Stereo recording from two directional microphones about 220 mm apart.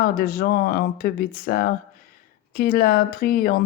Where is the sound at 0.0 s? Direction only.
40° left (ahead or behind).